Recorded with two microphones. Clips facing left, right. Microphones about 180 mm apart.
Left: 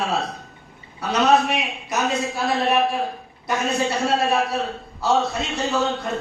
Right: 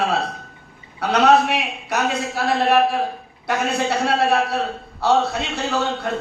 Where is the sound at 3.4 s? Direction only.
60° right (ahead or behind).